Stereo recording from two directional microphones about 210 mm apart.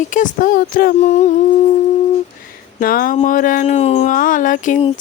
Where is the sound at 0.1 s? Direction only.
40° left (ahead or behind).